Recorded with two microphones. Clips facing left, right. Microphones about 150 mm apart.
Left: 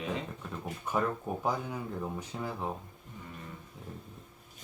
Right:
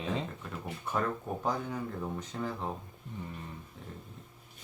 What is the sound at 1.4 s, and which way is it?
Speech, 10° left (ahead or behind).